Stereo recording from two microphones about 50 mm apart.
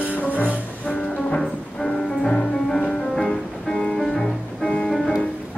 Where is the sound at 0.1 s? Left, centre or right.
Left.